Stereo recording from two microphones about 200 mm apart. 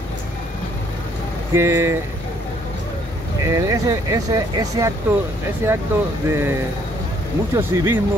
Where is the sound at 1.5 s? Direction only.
15° right (ahead or behind).